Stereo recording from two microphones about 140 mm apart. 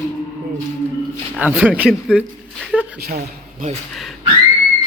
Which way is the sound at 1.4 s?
10° right (ahead or behind).